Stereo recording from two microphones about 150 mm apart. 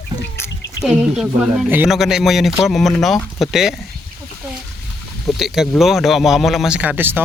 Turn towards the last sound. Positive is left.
turn(degrees=-15)  # may be behind; listen again after turning